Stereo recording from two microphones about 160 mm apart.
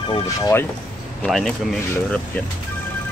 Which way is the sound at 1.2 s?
5° left (ahead or behind).